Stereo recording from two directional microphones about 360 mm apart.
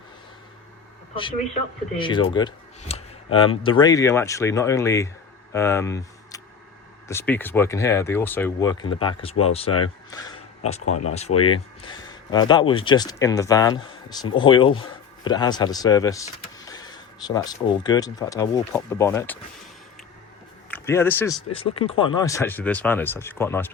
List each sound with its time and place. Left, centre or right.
1.1 s a man's voice: centre
10.8 s speech: left
11.1 s speech: centre
20.7 s speech: centre